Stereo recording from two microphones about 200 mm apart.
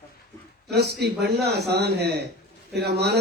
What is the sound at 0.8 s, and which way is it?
A man's voice, 55° right (ahead or behind).